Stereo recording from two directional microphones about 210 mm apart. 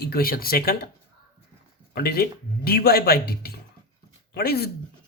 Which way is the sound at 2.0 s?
45° left (ahead or behind).